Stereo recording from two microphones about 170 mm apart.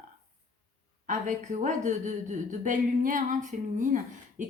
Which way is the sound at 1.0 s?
50° right (ahead or behind).